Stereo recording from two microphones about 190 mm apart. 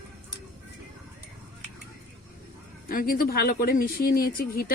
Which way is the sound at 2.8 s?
50° left (ahead or behind).